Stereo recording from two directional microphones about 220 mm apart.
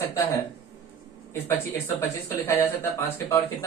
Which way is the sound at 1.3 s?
10° left (ahead or behind).